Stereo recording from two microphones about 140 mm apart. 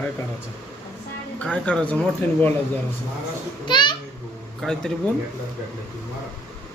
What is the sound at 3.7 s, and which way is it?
Speech, 35° left (ahead or behind).